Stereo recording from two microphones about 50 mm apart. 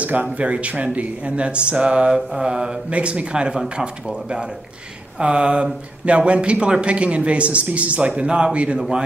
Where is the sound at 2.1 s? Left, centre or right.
Centre.